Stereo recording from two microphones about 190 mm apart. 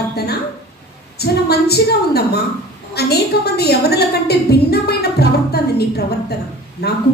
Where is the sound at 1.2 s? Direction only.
55° left (ahead or behind).